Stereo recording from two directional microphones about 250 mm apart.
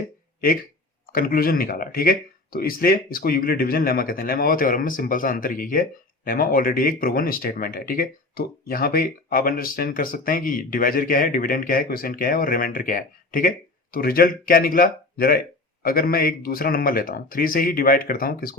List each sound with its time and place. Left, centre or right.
1.0 s speech: left